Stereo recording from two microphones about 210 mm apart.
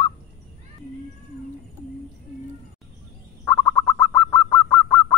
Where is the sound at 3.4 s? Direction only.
5° left (ahead or behind).